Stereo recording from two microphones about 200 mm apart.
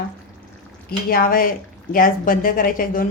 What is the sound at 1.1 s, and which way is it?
Speech, 45° left (ahead or behind).